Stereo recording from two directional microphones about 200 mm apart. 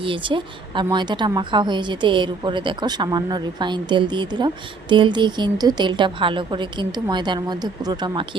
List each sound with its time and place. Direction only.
0.0 s a woman's voice: 25° right (ahead or behind)